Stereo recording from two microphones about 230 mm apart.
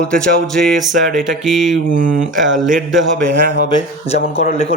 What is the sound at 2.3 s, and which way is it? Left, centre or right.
Speech, right.